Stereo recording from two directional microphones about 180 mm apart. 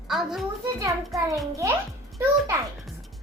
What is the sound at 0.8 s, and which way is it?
Speech, 15° right (ahead or behind).